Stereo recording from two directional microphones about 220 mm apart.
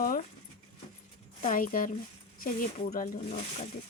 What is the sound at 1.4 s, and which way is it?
Speech, 35° left (ahead or behind).